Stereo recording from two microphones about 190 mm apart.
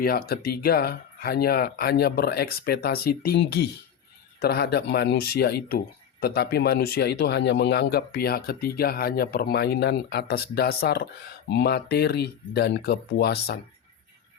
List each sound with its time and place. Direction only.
0.0 s speech: 50° left (ahead or behind)